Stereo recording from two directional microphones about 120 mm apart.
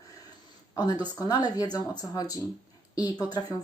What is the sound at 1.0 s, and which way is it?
A woman's voice, 35° left (ahead or behind).